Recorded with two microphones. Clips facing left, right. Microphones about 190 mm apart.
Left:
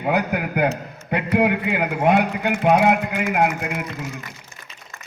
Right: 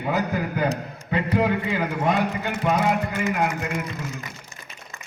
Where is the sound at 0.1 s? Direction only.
65° left (ahead or behind).